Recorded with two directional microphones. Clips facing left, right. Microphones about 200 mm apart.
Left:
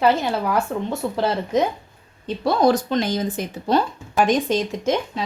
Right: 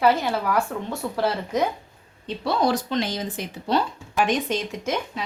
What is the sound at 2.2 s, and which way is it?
A woman's voice, 45° left (ahead or behind).